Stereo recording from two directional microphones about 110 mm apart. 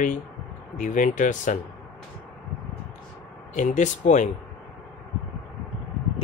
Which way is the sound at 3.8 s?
90° left.